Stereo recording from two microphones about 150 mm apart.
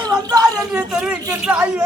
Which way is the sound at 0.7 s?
5° right (ahead or behind).